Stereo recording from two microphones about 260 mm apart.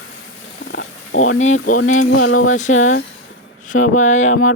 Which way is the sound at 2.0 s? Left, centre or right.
Left.